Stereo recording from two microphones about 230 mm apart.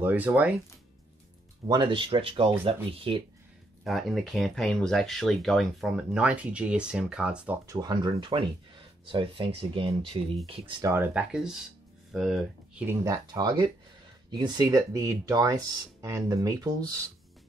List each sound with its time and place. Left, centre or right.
0.0 s speech: centre
1.7 s speech: right
3.8 s speech: centre
7.6 s speech: centre
10.8 s speech: centre
13.0 s speech: centre